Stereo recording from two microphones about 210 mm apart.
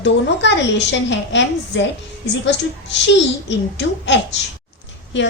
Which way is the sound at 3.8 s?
55° left (ahead or behind).